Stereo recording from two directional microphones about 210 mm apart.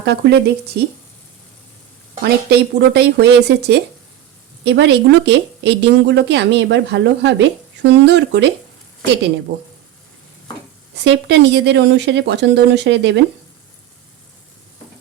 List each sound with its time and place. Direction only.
0.0 s speech: 50° right (ahead or behind)
2.2 s speech: 50° right (ahead or behind)
10.9 s speech: 55° right (ahead or behind)